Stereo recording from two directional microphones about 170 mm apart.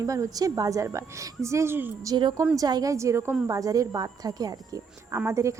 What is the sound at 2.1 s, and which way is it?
Speech, 25° right (ahead or behind).